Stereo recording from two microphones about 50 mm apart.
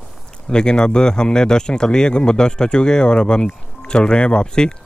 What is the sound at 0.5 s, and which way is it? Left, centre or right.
Speech, centre.